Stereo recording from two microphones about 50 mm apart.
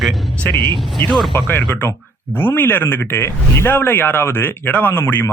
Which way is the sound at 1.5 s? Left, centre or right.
Left.